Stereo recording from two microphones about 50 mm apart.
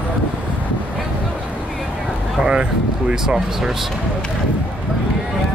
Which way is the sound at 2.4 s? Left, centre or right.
Centre.